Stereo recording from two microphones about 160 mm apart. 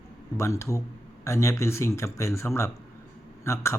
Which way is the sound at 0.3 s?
20° left (ahead or behind).